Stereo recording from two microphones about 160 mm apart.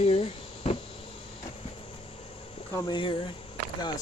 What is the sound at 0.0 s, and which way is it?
Insect, 40° left (ahead or behind).